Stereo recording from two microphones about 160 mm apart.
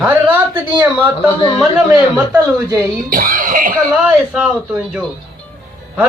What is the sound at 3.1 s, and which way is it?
Cough, 60° right (ahead or behind).